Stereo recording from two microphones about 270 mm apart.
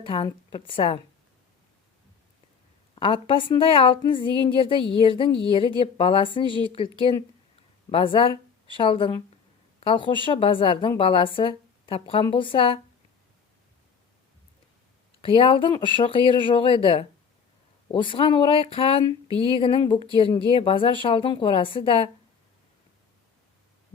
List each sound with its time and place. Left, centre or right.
0.0 s a woman's voice: centre
2.9 s a woman's voice: centre
15.2 s a woman's voice: centre